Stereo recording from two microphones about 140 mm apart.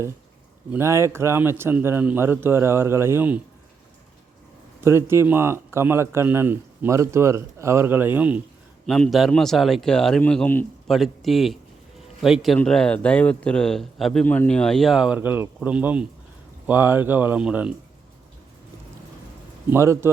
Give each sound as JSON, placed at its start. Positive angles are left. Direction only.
{"t": 0.7, "sound": "a man's voice", "side_deg": -20}
{"t": 4.8, "sound": "a man's voice", "side_deg": -15}
{"t": 8.9, "sound": "a man's voice", "side_deg": 0}
{"t": 10.8, "sound": "a man's voice", "side_deg": 0}
{"t": 19.7, "sound": "a man's voice", "side_deg": -20}